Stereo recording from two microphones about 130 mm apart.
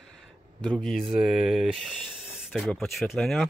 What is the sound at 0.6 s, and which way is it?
Speech, 5° left (ahead or behind).